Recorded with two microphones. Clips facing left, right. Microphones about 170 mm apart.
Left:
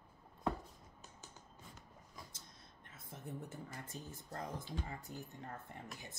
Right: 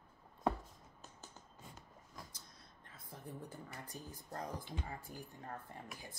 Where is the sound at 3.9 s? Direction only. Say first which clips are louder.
Left 1 dB; 25° left (ahead or behind).